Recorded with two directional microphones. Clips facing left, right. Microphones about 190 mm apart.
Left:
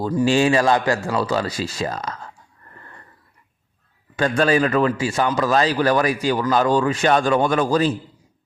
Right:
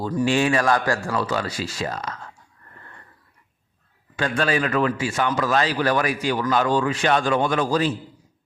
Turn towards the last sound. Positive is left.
turn(degrees=45)  # may be behind; listen again after turning